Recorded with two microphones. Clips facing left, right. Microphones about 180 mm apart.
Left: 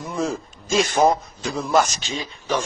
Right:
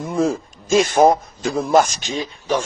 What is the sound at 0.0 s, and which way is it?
A man's voice, 55° right (ahead or behind).